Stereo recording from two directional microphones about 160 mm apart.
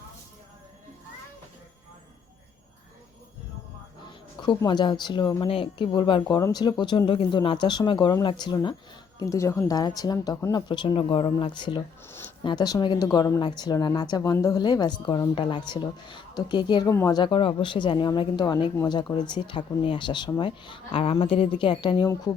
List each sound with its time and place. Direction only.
4.4 s speech: 25° left (ahead or behind)
22.0 s speech: 20° left (ahead or behind)